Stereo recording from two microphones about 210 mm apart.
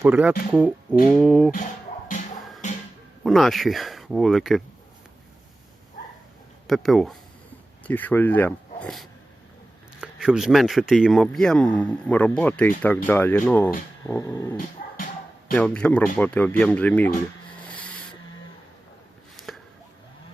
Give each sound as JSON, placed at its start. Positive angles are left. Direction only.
{"t": 0.0, "sound": "a man's voice", "side_deg": -5}
{"t": 3.2, "sound": "a man's voice", "side_deg": 0}
{"t": 6.7, "sound": "a man's voice", "side_deg": 0}
{"t": 14.9, "sound": "bow-wow", "side_deg": 40}
{"t": 15.5, "sound": "a man's voice", "side_deg": 5}
{"t": 17.7, "sound": "a sound", "side_deg": 5}